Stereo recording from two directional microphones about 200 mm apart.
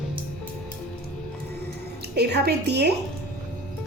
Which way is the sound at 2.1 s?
55° right (ahead or behind).